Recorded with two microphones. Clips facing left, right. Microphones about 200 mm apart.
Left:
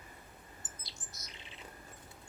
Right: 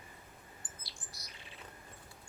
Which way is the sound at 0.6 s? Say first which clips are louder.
Left 1 dB; 20° left (ahead or behind).